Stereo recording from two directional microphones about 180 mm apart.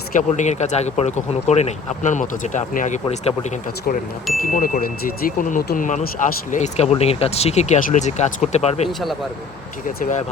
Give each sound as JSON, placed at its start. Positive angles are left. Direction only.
{"t": 0.2, "sound": "speech", "side_deg": 40}
{"t": 4.4, "sound": "speech", "side_deg": 50}
{"t": 6.5, "sound": "speech", "side_deg": 40}
{"t": 8.9, "sound": "speech", "side_deg": 0}
{"t": 10.0, "sound": "speech", "side_deg": 45}